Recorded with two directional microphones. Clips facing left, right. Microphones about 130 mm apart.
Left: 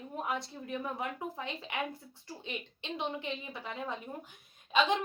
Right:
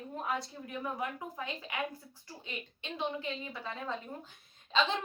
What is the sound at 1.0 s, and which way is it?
Speech, 25° left (ahead or behind).